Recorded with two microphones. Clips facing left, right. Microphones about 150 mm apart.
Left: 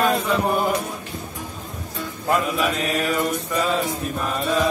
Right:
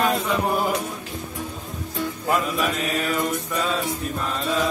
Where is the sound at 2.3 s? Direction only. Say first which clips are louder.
Left 3 dB; centre (ahead or behind).